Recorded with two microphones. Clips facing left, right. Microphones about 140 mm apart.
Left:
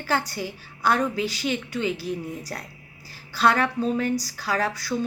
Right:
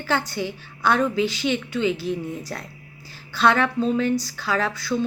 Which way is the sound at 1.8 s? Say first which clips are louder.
Right 5 dB; 10° left (ahead or behind).